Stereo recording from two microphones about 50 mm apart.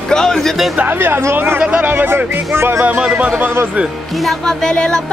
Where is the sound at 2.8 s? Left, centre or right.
Right.